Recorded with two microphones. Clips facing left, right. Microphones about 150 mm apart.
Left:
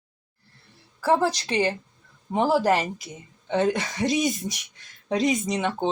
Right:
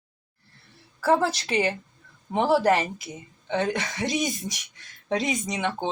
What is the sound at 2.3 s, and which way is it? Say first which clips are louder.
Speech: even; centre (ahead or behind).